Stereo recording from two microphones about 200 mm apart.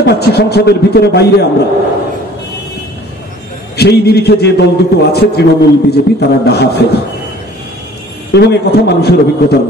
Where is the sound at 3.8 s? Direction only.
55° left (ahead or behind).